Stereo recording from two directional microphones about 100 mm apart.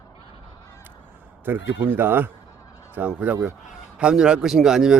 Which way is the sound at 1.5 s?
20° right (ahead or behind).